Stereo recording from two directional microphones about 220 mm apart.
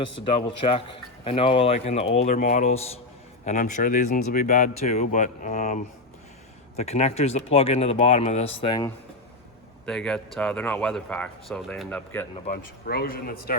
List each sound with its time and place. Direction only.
0.2 s speech: 25° left (ahead or behind)
9.8 s speech: 5° left (ahead or behind)
12.5 s speech: 45° left (ahead or behind)